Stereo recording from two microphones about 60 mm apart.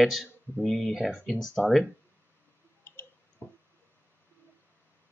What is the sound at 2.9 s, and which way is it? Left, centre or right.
Clicking, left.